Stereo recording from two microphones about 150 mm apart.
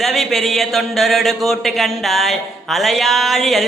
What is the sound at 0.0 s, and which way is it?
Mantra, centre (ahead or behind).